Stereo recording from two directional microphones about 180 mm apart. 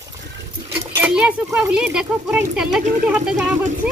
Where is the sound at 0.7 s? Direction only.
5° right (ahead or behind).